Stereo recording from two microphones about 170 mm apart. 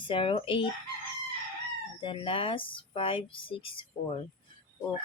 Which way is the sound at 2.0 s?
30° left (ahead or behind).